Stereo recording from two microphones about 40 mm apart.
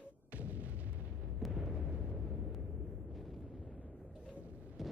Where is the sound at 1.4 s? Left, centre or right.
Centre.